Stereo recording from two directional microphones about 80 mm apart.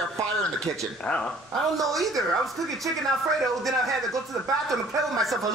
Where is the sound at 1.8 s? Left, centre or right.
Centre.